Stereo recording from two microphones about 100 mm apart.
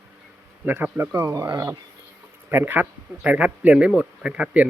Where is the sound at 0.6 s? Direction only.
20° right (ahead or behind).